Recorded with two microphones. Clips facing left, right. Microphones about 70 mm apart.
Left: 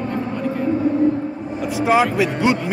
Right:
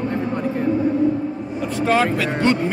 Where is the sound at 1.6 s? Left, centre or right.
Centre.